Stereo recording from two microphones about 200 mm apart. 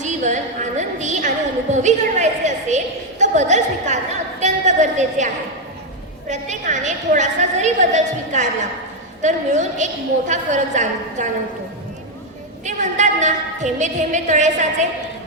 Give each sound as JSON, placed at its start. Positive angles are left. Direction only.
{"t": 0.0, "sound": "a sound", "side_deg": -35}
{"t": 1.7, "sound": "a woman's voice", "side_deg": -35}
{"t": 12.6, "sound": "a woman's voice", "side_deg": -35}